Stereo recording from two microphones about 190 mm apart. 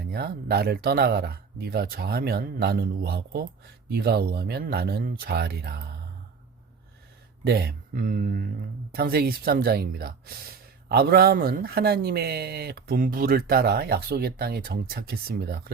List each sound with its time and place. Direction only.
0.1 s speech: 55° right (ahead or behind)
7.4 s speech: 55° right (ahead or behind)